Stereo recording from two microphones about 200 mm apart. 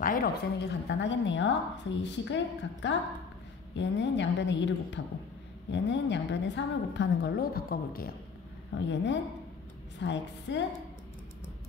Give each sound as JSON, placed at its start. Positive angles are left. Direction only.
{"t": 0.0, "sound": "a woman's voice", "side_deg": 45}
{"t": 8.7, "sound": "a woman's voice", "side_deg": 65}